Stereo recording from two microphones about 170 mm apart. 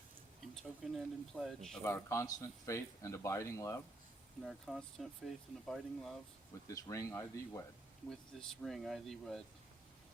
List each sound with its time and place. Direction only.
0.5 s speech: centre (ahead or behind)
1.8 s speech: 15° left (ahead or behind)
4.4 s speech: centre (ahead or behind)
6.7 s speech: 20° left (ahead or behind)
8.4 s speech: centre (ahead or behind)